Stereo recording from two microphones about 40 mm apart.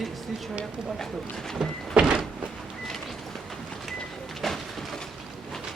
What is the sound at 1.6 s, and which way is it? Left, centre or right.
Door, centre.